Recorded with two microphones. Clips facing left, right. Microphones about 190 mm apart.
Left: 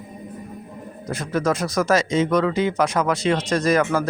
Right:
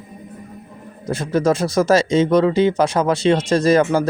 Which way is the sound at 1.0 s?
30° right (ahead or behind).